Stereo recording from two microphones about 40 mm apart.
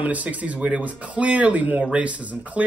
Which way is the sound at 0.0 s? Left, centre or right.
Right.